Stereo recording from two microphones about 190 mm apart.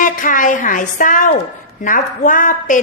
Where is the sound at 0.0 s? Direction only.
45° left (ahead or behind).